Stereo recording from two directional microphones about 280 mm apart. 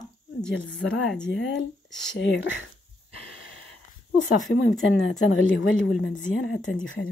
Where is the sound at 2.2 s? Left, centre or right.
Left.